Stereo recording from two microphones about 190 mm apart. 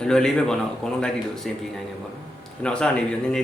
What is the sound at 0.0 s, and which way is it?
Speech, 5° left (ahead or behind).